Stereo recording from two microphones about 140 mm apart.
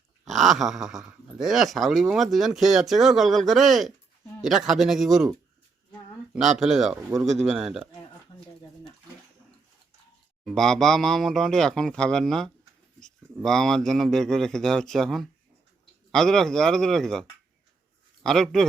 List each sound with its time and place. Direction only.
0.3 s speech: centre (ahead or behind)
6.6 s speech: 5° right (ahead or behind)
8.3 s a sound: 50° left (ahead or behind)
10.4 s a man's voice: 5° left (ahead or behind)